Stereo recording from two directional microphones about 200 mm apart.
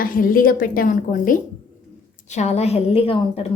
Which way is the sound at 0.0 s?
45° left (ahead or behind).